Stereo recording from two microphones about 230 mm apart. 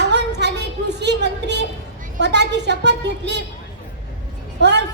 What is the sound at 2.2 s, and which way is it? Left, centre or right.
A woman's voice, right.